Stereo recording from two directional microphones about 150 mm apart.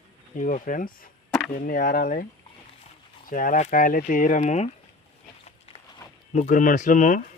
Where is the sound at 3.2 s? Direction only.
65° left (ahead or behind).